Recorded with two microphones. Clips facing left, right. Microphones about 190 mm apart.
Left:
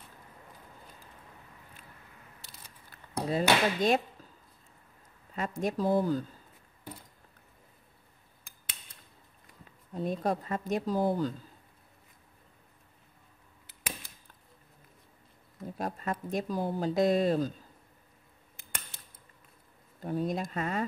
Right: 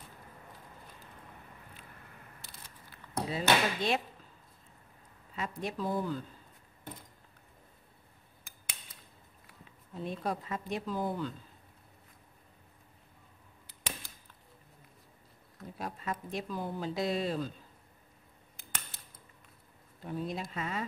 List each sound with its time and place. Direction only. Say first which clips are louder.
2.9 s speech: left 4 dB; 45° left (ahead or behind)
5.3 s speech: left 5 dB; 45° left (ahead or behind)
9.9 s speech: left 5 dB; 40° left (ahead or behind)
15.8 s speech: left 4 dB; 45° left (ahead or behind)
20.0 s speech: left 5 dB; 40° left (ahead or behind)